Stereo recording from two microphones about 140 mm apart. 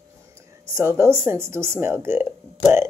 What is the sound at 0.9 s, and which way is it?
A woman's voice, 20° right (ahead or behind).